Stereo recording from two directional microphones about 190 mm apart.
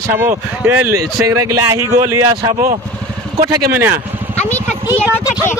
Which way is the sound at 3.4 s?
10° right (ahead or behind).